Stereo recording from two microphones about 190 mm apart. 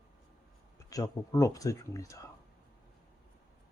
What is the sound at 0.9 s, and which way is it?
Speech, 20° left (ahead or behind).